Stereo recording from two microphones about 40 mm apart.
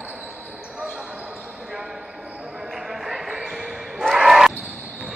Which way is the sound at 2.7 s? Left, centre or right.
Centre.